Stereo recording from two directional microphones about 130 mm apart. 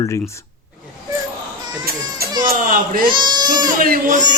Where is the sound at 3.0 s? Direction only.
35° right (ahead or behind).